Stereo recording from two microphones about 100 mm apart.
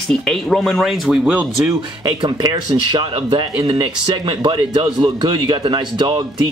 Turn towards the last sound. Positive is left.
turn(degrees=-50)  # may be behind; listen again after turning